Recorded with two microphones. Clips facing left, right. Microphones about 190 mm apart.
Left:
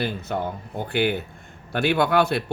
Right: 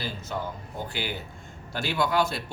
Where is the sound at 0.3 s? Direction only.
60° left (ahead or behind).